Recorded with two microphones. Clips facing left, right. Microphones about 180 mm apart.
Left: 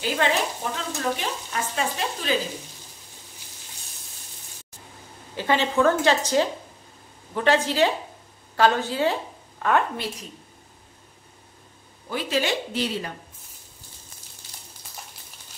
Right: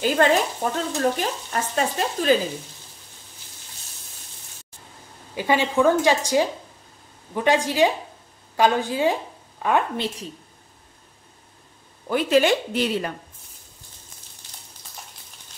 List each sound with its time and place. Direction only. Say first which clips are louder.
0.0 s stir: right 5 dB; 45° right (ahead or behind)
5.3 s a woman's voice: right 2 dB; 10° right (ahead or behind)
12.1 s speech: right 7 dB; 55° right (ahead or behind)